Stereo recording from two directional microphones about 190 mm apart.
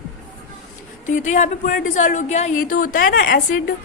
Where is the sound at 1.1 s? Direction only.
40° left (ahead or behind).